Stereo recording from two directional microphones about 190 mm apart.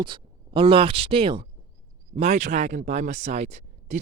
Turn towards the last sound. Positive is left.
turn(degrees=-40)  # may be behind; listen again after turning